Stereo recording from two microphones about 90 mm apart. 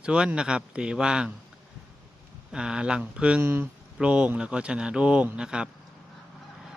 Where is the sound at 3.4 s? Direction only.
25° right (ahead or behind).